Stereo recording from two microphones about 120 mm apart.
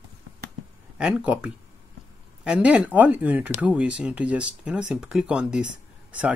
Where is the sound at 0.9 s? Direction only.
10° right (ahead or behind).